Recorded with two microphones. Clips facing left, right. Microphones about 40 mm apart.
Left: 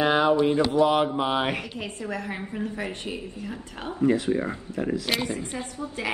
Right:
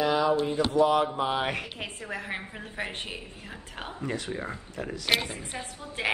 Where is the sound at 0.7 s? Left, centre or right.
Left.